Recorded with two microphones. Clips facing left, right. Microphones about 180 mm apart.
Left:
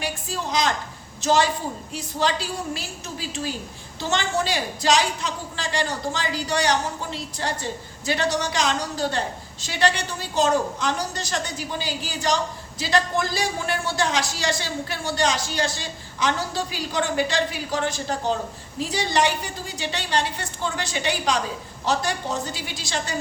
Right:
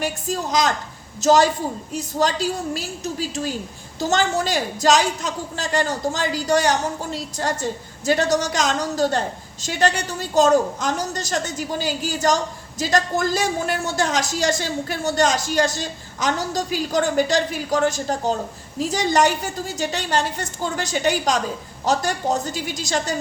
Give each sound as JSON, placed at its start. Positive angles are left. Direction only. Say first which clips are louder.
{"t": 0.0, "sound": "a woman's voice", "louder": "right 4 dB", "side_deg": -45}